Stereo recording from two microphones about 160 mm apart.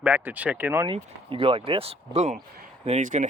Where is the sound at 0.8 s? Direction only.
35° right (ahead or behind).